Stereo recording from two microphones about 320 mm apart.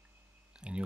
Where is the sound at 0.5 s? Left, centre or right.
Centre.